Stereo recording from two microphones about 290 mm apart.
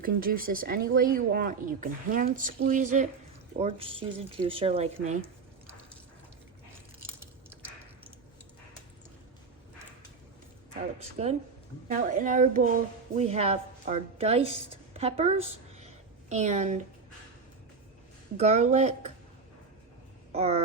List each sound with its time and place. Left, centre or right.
0.0 s speech: right
11.2 s a woman's voice: right
18.3 s speech: right
20.3 s a sound: right